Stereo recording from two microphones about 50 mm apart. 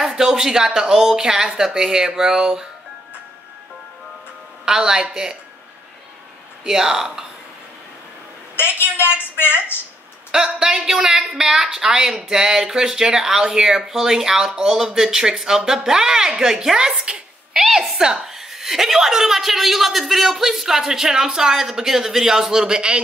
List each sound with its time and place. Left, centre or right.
0.0 s a woman's voice: centre
4.6 s a woman's voice: centre
6.6 s a woman's voice: centre
8.5 s a woman's voice: left
10.3 s a woman's voice: centre